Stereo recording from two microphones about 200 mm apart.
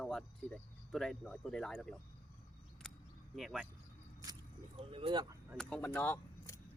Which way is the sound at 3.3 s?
Centre (ahead or behind).